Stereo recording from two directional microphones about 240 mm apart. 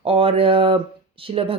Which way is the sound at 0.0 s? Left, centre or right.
Right.